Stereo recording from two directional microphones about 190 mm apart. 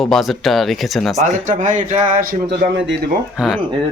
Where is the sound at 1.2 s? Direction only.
40° right (ahead or behind).